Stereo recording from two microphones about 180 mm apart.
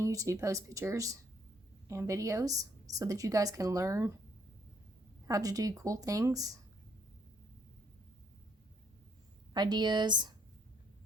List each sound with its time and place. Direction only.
0.0 s a woman's voice: 15° right (ahead or behind)
5.3 s a woman's voice: 20° right (ahead or behind)
9.5 s a woman's voice: 25° right (ahead or behind)